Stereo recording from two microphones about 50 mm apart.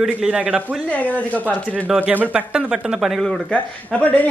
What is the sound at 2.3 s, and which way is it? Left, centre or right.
Speech, right.